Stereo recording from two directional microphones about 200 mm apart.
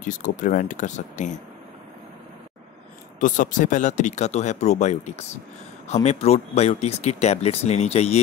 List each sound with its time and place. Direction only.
0.0 s speech: 40° left (ahead or behind)
3.2 s speech: 40° left (ahead or behind)